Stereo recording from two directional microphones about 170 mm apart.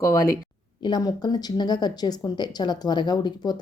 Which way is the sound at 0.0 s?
20° left (ahead or behind).